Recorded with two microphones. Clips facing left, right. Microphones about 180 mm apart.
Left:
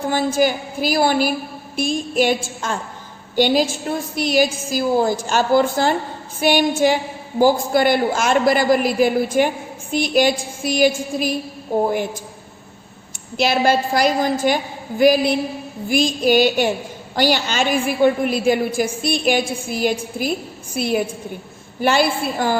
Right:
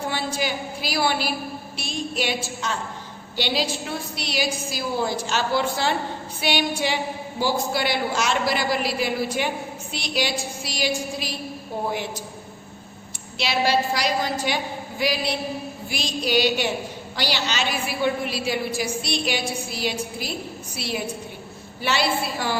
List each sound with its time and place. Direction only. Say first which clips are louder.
0.1 s a woman's voice: left 13 dB; 45° left (ahead or behind)
13.3 s a woman's voice: left 5 dB; 50° left (ahead or behind)